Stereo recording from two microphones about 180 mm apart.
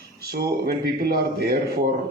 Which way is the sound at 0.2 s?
60° right (ahead or behind).